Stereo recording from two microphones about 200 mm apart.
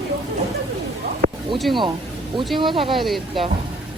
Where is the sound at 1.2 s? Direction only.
40° right (ahead or behind).